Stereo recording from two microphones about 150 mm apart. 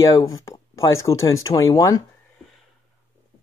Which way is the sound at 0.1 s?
20° left (ahead or behind).